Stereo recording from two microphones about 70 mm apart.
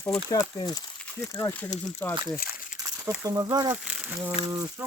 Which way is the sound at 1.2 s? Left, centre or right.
Left.